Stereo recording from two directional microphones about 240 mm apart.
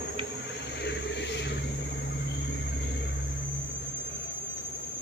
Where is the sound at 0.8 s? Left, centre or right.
Left.